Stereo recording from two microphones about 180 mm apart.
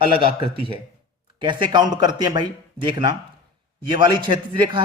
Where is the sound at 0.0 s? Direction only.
30° right (ahead or behind).